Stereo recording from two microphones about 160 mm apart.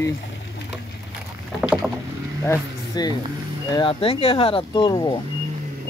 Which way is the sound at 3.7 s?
35° left (ahead or behind).